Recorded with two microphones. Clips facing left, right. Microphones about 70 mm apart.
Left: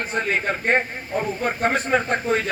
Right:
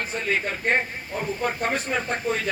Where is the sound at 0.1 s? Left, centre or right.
Left.